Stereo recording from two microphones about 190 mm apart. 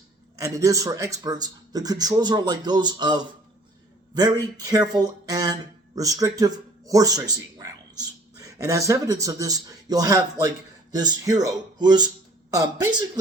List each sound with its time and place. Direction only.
0.3 s speech: 15° right (ahead or behind)